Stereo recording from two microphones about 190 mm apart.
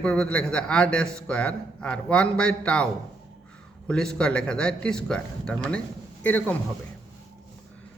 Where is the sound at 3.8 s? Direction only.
5° left (ahead or behind).